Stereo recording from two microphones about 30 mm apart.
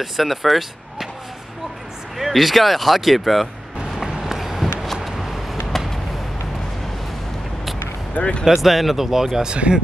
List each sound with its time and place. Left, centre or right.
0.0 s speech: centre
2.1 s speech: centre
4.2 s run: centre
5.0 s a sound: centre
8.2 s speech: left
8.5 s speech: centre